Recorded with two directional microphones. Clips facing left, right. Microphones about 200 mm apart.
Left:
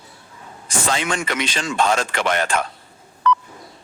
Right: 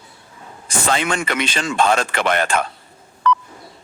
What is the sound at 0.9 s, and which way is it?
Speech, 60° right (ahead or behind).